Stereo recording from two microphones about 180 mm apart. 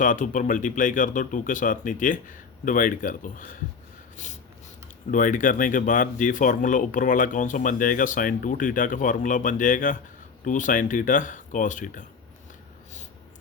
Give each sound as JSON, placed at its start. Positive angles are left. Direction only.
{"t": 0.0, "sound": "speech", "side_deg": 45}
{"t": 4.2, "sound": "a sound", "side_deg": 40}
{"t": 5.1, "sound": "speech", "side_deg": 45}